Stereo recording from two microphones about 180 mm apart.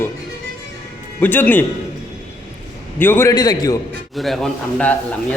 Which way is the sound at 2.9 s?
10° left (ahead or behind).